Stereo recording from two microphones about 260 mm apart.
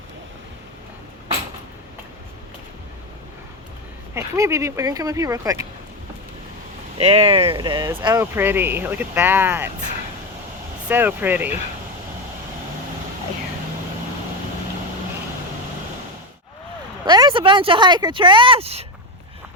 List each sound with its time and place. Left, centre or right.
4.1 s speech: centre
7.0 s speech: right
10.8 s speech: centre
17.1 s speech: centre